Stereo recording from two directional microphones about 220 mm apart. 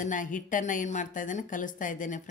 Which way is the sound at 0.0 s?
35° left (ahead or behind).